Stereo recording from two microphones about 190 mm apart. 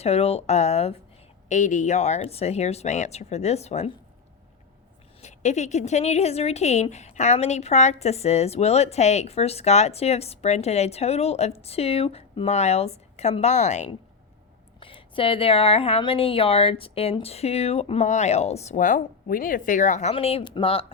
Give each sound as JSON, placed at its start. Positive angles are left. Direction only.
{"t": 0.0, "sound": "a woman's voice", "side_deg": 35}
{"t": 5.2, "sound": "a woman's voice", "side_deg": 35}
{"t": 14.8, "sound": "a woman's voice", "side_deg": 25}